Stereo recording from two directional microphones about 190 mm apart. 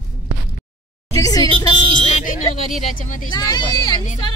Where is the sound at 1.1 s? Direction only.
20° left (ahead or behind).